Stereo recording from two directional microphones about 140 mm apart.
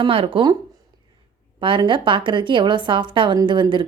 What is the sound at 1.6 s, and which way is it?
A woman's voice, 35° right (ahead or behind).